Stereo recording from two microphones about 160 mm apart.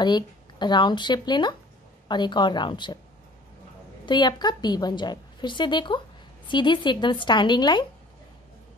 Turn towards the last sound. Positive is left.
turn(degrees=25)  # may be behind; listen again after turning